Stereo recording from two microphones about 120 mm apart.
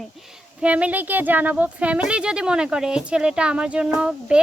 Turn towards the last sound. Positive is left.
turn(degrees=-10)  # may be behind; listen again after turning